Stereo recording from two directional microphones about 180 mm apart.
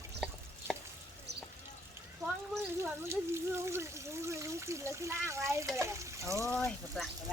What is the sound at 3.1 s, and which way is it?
Speech, 15° right (ahead or behind).